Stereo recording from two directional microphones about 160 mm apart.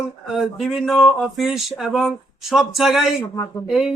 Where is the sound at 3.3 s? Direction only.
20° left (ahead or behind).